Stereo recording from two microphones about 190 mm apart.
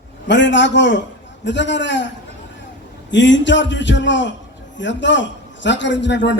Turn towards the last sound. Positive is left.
turn(degrees=70)  # may be behind; listen again after turning